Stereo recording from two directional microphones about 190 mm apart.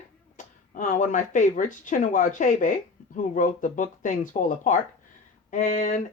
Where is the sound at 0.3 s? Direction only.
45° left (ahead or behind).